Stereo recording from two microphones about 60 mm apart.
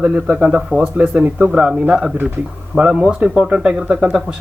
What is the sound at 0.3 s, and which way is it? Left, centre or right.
A man's voice, centre.